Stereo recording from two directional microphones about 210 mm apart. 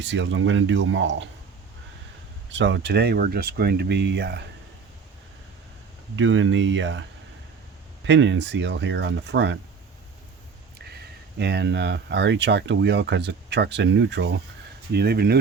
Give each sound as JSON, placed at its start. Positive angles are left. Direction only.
{"t": 0.0, "sound": "speech", "side_deg": -60}
{"t": 2.5, "sound": "speech", "side_deg": -60}
{"t": 6.1, "sound": "speech", "side_deg": -65}
{"t": 8.0, "sound": "speech", "side_deg": -60}
{"t": 10.8, "sound": "speech", "side_deg": -50}